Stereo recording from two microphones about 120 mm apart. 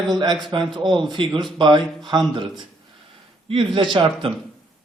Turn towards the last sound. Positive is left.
turn(degrees=-45)  # may be behind; listen again after turning